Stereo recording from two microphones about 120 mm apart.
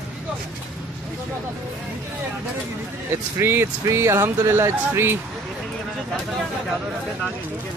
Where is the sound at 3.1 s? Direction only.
20° right (ahead or behind).